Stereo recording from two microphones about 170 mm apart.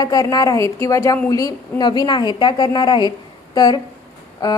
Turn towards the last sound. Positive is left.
turn(degrees=20)  # may be behind; listen again after turning